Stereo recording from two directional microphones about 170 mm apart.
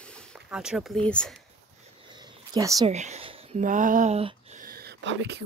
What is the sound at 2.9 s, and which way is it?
Speech, 40° right (ahead or behind).